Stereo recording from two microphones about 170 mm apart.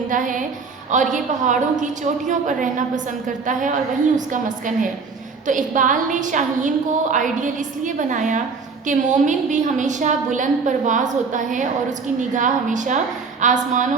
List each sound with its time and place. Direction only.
0.1 s a woman's voice: 50° right (ahead or behind)